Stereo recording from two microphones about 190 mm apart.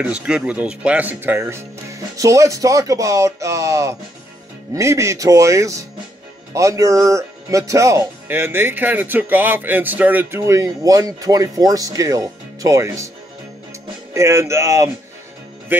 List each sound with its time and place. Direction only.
0.0 s speech: 5° right (ahead or behind)
14.1 s speech: 15° right (ahead or behind)